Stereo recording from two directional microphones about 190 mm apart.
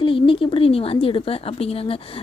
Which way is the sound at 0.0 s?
25° left (ahead or behind).